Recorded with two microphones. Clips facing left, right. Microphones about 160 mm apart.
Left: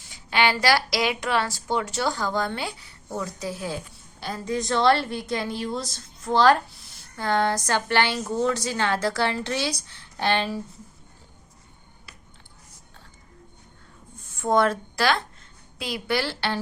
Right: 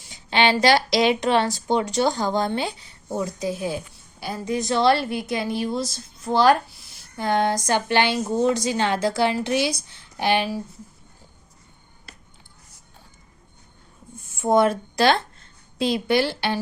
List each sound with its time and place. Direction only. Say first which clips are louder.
0.1 s a woman's voice: right 3 dB; 25° right (ahead or behind)
14.4 s a woman's voice: right 3 dB; 15° right (ahead or behind)